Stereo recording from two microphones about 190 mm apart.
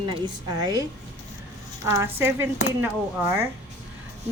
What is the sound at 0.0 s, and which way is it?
Speech, 25° right (ahead or behind).